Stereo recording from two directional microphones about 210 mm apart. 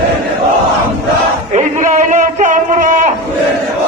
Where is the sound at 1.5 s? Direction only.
35° right (ahead or behind).